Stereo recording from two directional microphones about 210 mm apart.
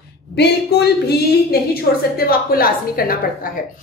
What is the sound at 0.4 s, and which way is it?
A woman's voice, 50° left (ahead or behind).